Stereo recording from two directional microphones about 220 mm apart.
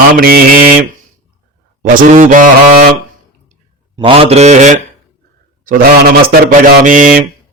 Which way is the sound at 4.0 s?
25° right (ahead or behind).